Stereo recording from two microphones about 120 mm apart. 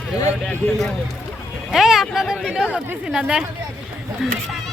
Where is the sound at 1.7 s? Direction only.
Centre (ahead or behind).